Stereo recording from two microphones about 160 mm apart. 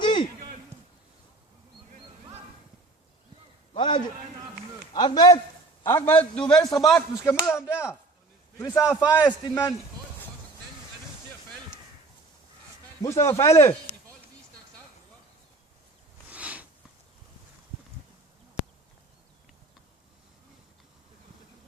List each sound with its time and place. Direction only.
0.0 s a sound: 30° left (ahead or behind)
3.8 s a man's voice: 30° left (ahead or behind)
5.8 s a man's voice: 15° left (ahead or behind)
6.6 s a man's voice: 20° left (ahead or behind)
13.0 s a man's voice: 20° left (ahead or behind)
16.3 s sniff: 10° right (ahead or behind)